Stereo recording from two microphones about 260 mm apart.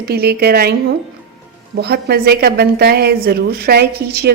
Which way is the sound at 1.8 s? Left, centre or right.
Right.